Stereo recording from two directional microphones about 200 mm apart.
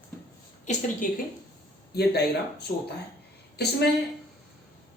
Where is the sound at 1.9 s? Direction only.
55° left (ahead or behind).